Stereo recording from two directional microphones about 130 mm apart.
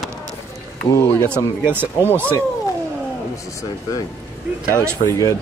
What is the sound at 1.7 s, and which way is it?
Speech, 15° right (ahead or behind).